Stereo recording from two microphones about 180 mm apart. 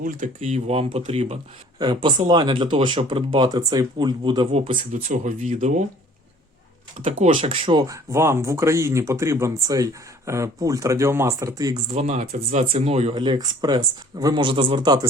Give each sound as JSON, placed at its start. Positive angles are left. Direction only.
{"t": 0.0, "sound": "speech", "side_deg": -45}
{"t": 1.8, "sound": "speech", "side_deg": -25}
{"t": 4.8, "sound": "speech", "side_deg": -45}
{"t": 7.0, "sound": "speech", "side_deg": -40}
{"t": 7.3, "sound": "speech", "side_deg": -30}
{"t": 11.9, "sound": "speech", "side_deg": -35}